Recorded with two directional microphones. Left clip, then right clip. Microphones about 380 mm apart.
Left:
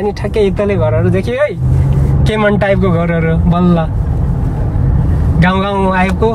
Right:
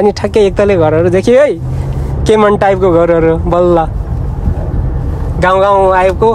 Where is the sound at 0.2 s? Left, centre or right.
Right.